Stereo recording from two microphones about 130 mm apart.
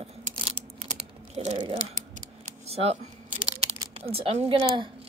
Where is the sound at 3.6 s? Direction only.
50° right (ahead or behind).